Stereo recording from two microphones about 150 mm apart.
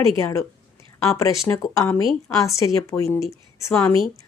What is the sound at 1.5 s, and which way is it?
A woman's voice, 20° left (ahead or behind).